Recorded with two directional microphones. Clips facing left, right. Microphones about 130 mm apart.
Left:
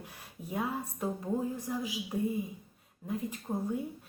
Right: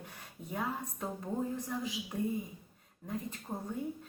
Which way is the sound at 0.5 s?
10° left (ahead or behind).